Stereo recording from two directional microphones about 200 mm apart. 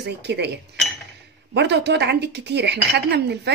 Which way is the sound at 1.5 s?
60° right (ahead or behind).